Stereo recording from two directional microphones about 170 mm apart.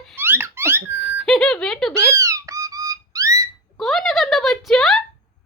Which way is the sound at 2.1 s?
20° right (ahead or behind).